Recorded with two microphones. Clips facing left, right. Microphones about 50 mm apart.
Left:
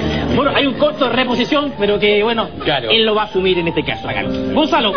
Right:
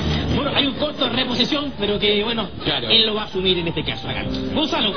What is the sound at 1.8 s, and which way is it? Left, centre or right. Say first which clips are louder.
A man's voice: left 6 dB; left.